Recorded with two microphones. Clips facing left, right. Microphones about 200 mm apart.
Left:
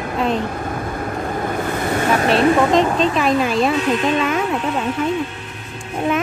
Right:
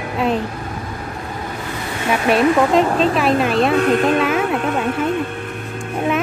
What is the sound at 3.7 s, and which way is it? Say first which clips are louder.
Speech: right 3 dB; 55° right (ahead or behind).